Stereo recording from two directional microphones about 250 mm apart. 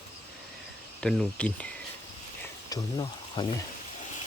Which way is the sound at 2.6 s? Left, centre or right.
Centre.